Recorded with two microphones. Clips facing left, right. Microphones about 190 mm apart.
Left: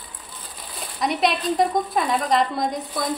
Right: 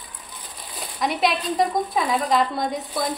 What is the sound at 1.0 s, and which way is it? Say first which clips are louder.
Speech: left 1 dB; centre (ahead or behind).